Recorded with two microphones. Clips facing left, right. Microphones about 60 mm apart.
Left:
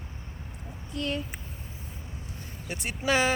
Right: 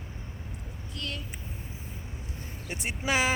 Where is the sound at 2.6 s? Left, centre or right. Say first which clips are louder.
Left 2 dB; right.